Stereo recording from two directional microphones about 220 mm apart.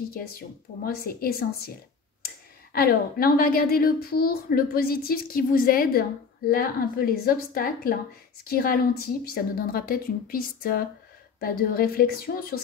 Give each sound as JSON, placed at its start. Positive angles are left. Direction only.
{"t": 0.1, "sound": "a woman's voice", "side_deg": 45}
{"t": 2.7, "sound": "a woman's voice", "side_deg": 45}